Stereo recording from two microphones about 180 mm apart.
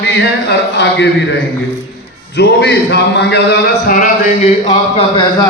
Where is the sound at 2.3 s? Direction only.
75° left (ahead or behind).